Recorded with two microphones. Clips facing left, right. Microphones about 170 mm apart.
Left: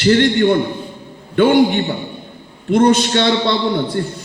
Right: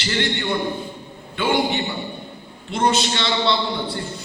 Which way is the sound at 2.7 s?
50° left (ahead or behind).